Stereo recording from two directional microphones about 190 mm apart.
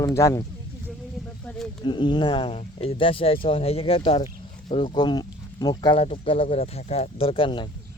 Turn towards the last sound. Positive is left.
turn(degrees=25)  # may be behind; listen again after turning